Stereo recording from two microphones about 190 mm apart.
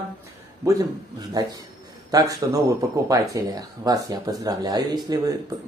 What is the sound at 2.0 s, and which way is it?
Speech, 20° right (ahead or behind).